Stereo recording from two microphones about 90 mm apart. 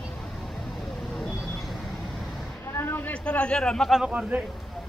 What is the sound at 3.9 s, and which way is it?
Speech, 10° right (ahead or behind).